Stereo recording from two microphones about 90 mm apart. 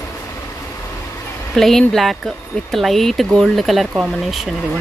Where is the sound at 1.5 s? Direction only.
5° left (ahead or behind).